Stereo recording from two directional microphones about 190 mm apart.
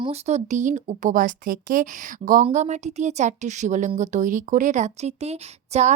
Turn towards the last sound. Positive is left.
turn(degrees=-35)  # may be behind; listen again after turning